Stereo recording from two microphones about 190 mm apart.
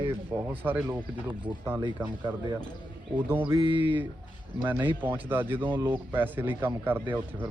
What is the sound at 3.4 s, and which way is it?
Music, 25° right (ahead or behind).